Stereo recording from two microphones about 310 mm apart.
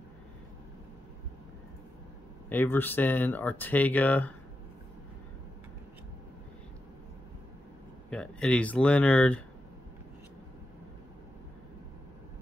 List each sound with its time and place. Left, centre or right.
2.5 s speech: centre
8.1 s speech: centre